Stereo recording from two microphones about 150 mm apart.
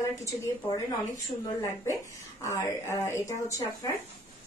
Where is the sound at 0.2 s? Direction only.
20° left (ahead or behind).